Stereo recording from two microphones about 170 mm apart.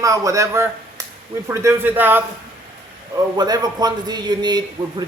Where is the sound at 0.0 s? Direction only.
20° right (ahead or behind).